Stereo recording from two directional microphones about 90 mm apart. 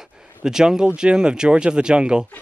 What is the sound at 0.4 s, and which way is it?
Speech, 5° right (ahead or behind).